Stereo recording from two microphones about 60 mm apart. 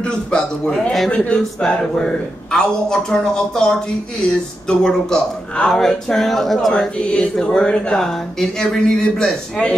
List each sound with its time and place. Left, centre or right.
0.0 s speech: centre
1.1 s speech: centre
6.7 s speech: centre
8.0 s speech: centre